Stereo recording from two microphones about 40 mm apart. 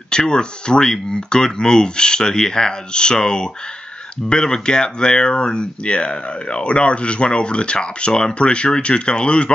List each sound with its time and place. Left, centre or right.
0.1 s speech: left